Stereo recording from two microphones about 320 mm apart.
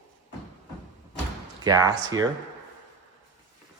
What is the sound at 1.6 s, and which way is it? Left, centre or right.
Speech, centre.